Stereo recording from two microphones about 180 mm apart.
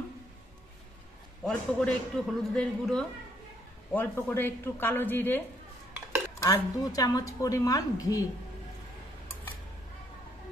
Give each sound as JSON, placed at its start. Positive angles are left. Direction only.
{"t": 1.4, "sound": "a man's voice", "side_deg": 5}
{"t": 6.4, "sound": "a woman's voice", "side_deg": 20}